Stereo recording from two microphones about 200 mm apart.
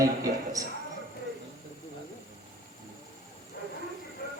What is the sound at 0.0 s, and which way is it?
Speech, 15° right (ahead or behind).